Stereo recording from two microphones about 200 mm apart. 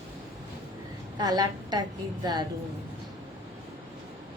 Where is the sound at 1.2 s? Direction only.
20° right (ahead or behind).